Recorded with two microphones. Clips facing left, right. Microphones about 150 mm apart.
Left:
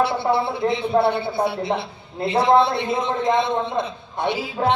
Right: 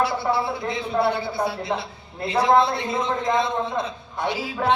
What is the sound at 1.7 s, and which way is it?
Speech, 20° left (ahead or behind).